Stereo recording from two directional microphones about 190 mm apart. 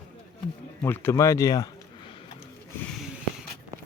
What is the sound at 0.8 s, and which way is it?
Speech, 10° left (ahead or behind).